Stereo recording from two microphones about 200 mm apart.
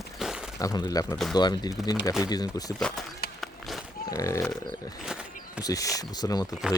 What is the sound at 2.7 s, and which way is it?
Speech, centre (ahead or behind).